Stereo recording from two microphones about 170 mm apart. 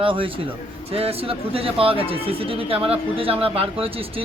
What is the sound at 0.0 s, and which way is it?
Speech, 30° right (ahead or behind).